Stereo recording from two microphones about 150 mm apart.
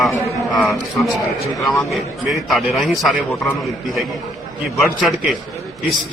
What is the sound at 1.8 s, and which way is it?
A man's voice, centre (ahead or behind).